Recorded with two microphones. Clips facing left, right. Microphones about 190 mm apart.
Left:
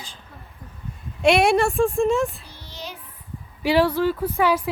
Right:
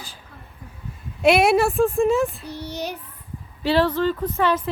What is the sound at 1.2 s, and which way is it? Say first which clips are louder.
Speech: right 1 dB; centre (ahead or behind).